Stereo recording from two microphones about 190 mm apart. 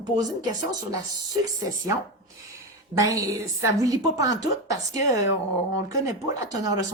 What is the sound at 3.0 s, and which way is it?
Speech, 15° right (ahead or behind).